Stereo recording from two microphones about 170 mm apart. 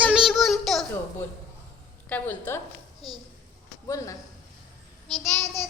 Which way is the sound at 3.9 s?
20° left (ahead or behind).